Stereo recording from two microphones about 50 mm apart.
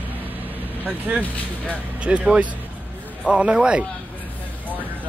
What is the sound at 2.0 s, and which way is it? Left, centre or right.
Speech, right.